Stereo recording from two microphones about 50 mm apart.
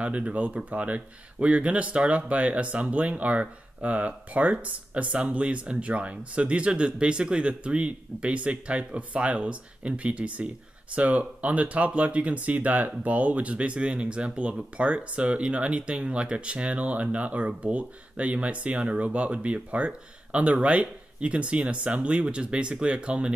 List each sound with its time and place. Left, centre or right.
0.0 s speech: right